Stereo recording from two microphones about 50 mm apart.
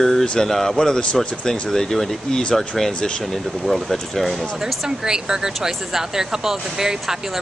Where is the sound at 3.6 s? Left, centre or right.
Centre.